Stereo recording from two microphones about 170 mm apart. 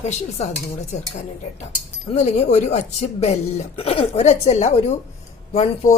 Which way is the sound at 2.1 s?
40° left (ahead or behind).